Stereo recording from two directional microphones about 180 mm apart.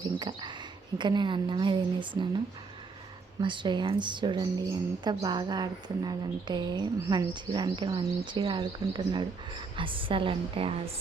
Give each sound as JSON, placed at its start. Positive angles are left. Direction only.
{"t": 0.0, "sound": "a woman's voice", "side_deg": -25}
{"t": 3.4, "sound": "a woman's voice", "side_deg": -25}